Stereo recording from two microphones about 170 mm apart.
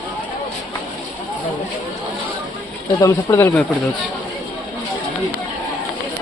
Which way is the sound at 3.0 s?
20° left (ahead or behind).